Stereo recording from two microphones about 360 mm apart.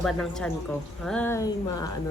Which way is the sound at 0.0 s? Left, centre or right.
Centre.